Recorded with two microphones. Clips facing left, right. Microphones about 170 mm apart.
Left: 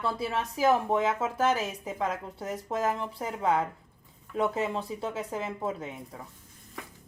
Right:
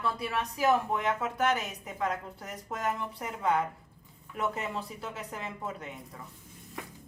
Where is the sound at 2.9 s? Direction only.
30° left (ahead or behind).